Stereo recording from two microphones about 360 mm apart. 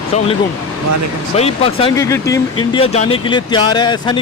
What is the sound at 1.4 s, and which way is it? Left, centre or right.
Speech, centre.